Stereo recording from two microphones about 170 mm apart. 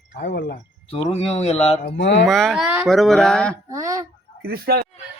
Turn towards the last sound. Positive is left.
turn(degrees=-65)  # may be behind; listen again after turning